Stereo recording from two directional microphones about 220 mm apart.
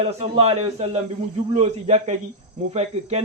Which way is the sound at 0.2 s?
25° right (ahead or behind).